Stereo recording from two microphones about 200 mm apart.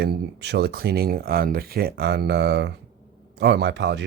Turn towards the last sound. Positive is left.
turn(degrees=-60)  # may be behind; listen again after turning